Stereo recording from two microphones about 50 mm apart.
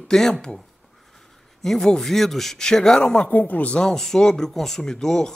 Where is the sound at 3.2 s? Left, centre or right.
Left.